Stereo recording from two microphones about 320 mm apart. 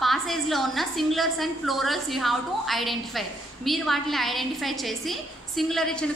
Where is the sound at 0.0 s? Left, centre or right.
Centre.